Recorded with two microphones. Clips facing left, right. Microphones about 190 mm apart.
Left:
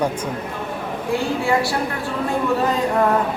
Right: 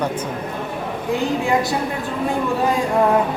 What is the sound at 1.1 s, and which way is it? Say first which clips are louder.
Speech: right 1 dB; 20° right (ahead or behind).